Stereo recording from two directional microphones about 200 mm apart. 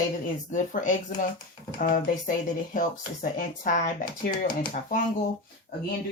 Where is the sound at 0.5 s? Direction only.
40° left (ahead or behind).